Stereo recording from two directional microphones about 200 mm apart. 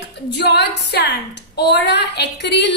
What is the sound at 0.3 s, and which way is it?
A woman's voice, 60° left (ahead or behind).